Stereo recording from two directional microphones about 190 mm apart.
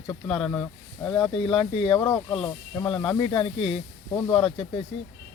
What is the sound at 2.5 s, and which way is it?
Speech, 10° left (ahead or behind).